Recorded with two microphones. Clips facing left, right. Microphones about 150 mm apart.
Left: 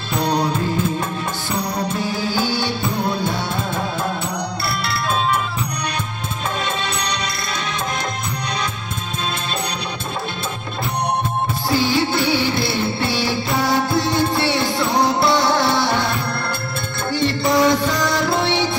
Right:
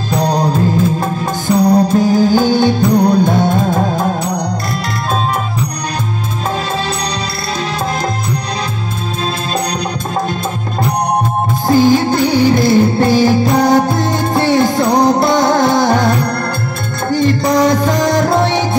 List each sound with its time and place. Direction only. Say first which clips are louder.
0.2 s music: right 5 dB; 40° right (ahead or behind)
11.6 s music: right 9 dB; 45° right (ahead or behind)